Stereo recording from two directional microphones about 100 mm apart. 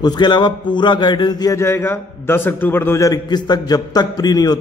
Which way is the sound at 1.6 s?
25° left (ahead or behind).